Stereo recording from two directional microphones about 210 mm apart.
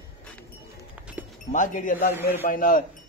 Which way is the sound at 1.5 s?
40° left (ahead or behind).